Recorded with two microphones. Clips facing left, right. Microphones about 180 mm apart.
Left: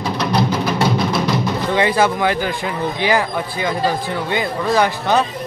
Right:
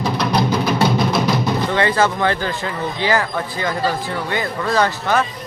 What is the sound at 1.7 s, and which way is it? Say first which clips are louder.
Speech: left 3 dB; 15° left (ahead or behind).